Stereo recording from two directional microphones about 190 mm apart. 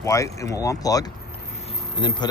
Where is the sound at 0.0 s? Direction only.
15° left (ahead or behind).